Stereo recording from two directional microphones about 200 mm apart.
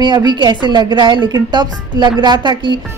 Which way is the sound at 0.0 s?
20° right (ahead or behind).